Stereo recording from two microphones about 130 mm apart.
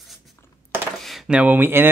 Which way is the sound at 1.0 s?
Centre (ahead or behind).